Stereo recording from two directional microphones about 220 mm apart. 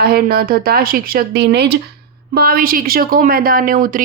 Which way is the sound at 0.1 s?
45° right (ahead or behind).